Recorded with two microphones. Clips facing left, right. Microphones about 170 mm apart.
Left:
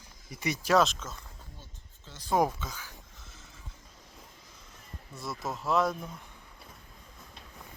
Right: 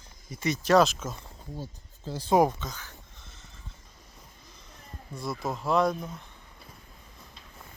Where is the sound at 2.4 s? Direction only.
10° left (ahead or behind).